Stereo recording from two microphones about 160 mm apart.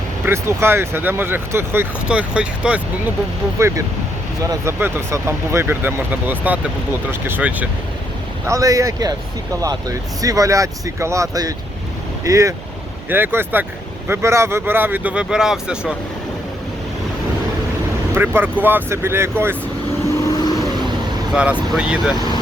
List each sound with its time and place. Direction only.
0.3 s speech: 15° right (ahead or behind)
3.6 s speech: 20° right (ahead or behind)
8.4 s speech: 20° right (ahead or behind)
18.1 s speech: 15° right (ahead or behind)
20.2 s vehicle: 25° left (ahead or behind)
21.8 s speech: 5° right (ahead or behind)